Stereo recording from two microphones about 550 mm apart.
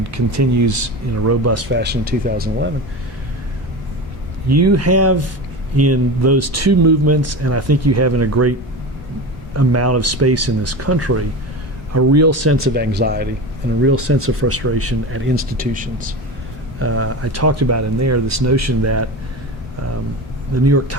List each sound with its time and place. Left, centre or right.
0.0 s speech: right
4.4 s speech: right
9.6 s speech: right
20.7 s speech: right